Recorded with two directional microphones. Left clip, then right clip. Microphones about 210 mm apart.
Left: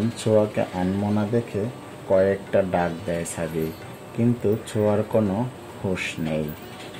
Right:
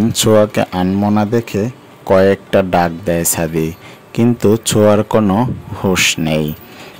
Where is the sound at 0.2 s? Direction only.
45° right (ahead or behind).